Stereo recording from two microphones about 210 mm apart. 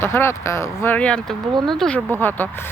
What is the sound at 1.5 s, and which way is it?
Speech, 20° right (ahead or behind).